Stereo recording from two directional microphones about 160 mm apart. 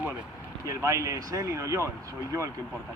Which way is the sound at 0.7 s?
20° right (ahead or behind).